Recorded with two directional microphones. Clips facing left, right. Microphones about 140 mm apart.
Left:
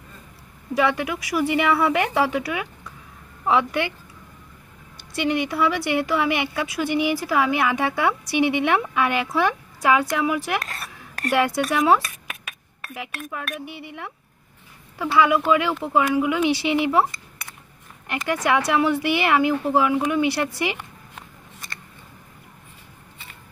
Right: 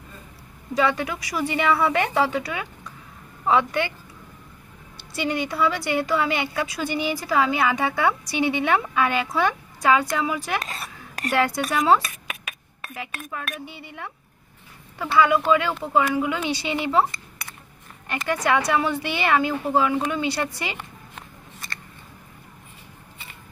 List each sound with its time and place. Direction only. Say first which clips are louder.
0.7 s speech: left 1 dB; 5° left (ahead or behind)
5.5 s a woman's voice: left 1 dB; 5° left (ahead or behind)
10.6 s a sound: right 1 dB; 20° right (ahead or behind)
11.2 s a woman's voice: left 2 dB; 5° left (ahead or behind)
12.0 s a sound: right 1 dB; 10° right (ahead or behind)
12.8 s a woman's voice: left 1 dB; centre (ahead or behind)
13.7 s speech: left 4 dB; 90° left
15.0 s speech: left 1 dB; 5° left (ahead or behind)
18.2 s speech: left 1 dB; 5° left (ahead or behind)